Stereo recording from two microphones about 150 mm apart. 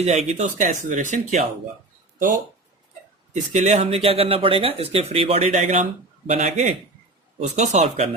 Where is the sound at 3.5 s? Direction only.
45° right (ahead or behind).